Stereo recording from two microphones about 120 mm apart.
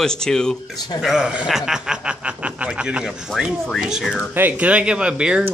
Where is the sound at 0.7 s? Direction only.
35° left (ahead or behind).